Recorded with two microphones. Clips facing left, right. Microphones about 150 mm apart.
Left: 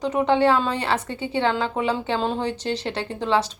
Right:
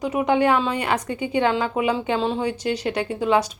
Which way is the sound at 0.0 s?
10° right (ahead or behind).